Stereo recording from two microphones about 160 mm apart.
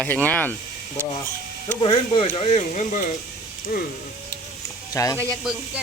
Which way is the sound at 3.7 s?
70° left (ahead or behind).